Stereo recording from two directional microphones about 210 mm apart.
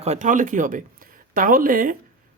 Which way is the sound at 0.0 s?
35° right (ahead or behind).